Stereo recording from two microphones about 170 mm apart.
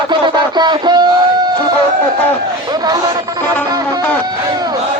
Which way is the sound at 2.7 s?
25° right (ahead or behind).